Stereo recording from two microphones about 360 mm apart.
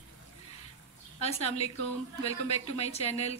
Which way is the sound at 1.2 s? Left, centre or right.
Centre.